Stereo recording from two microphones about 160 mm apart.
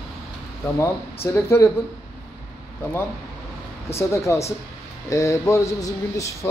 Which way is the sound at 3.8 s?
15° left (ahead or behind).